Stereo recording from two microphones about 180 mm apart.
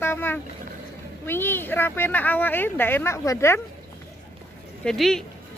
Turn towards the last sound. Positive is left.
turn(degrees=0)  # may be behind; listen again after turning